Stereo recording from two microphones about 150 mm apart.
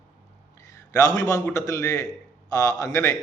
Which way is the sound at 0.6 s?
20° left (ahead or behind).